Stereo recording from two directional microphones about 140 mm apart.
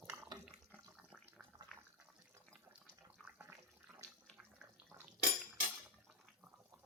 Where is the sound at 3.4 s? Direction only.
15° right (ahead or behind).